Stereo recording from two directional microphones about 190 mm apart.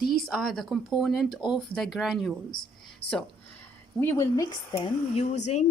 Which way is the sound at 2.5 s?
50° left (ahead or behind).